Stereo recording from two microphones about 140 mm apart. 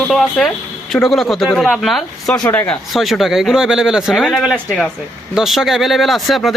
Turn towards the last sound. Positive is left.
turn(degrees=0)  # may be behind; listen again after turning